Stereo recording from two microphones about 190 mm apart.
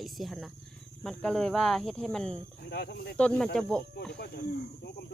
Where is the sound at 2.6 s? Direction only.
60° left (ahead or behind).